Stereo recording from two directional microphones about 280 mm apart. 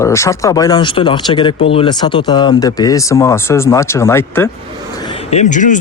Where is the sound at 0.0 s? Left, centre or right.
Centre.